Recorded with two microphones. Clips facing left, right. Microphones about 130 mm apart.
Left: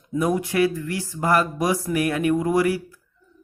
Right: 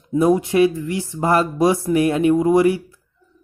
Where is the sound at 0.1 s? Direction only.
25° right (ahead or behind).